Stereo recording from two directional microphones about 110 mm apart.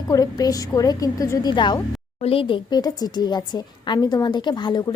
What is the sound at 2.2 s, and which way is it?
A woman's voice, 60° left (ahead or behind).